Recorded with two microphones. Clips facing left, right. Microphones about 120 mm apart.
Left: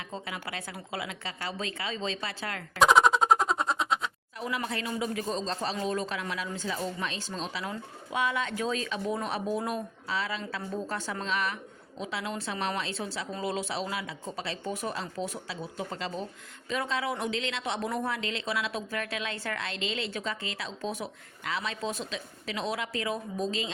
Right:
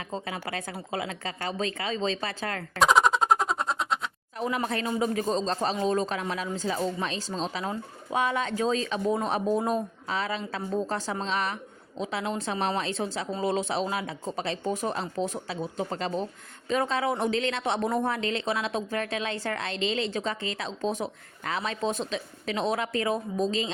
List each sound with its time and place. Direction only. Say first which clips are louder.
0.1 s speech: right 5 dB; 35° right (ahead or behind)
2.7 s a sound: even; centre (ahead or behind)
4.4 s speech: right 5 dB; 35° right (ahead or behind)